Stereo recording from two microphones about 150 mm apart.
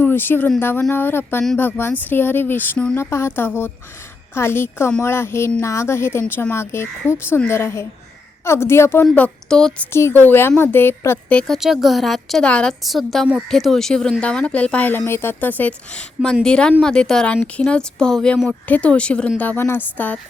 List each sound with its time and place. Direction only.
0.0 s a woman's voice: 15° left (ahead or behind)
9.0 s a woman's voice: 5° left (ahead or behind)